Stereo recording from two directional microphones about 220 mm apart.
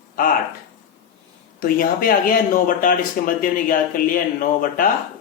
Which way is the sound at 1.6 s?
40° left (ahead or behind).